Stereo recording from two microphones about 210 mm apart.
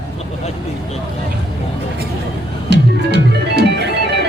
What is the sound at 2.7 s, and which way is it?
Music, 55° right (ahead or behind).